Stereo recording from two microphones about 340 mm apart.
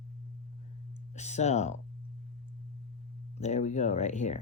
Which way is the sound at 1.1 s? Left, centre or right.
Centre.